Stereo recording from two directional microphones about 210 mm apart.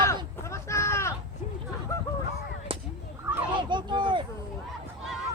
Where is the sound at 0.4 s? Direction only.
15° left (ahead or behind).